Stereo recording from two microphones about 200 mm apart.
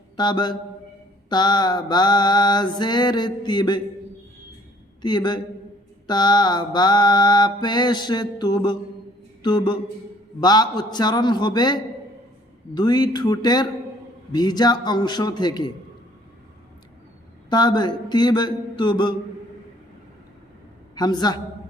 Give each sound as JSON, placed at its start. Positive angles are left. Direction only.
{"t": 0.2, "sound": "mantra", "side_deg": 20}
{"t": 5.0, "sound": "mantra", "side_deg": 20}
{"t": 17.5, "sound": "mantra", "side_deg": 20}
{"t": 20.9, "sound": "a woman's voice", "side_deg": 20}